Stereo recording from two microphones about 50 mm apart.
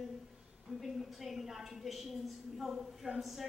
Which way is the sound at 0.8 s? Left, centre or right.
Centre.